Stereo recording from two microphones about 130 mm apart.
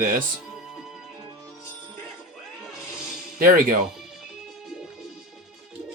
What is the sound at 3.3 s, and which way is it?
Speech, 90° right.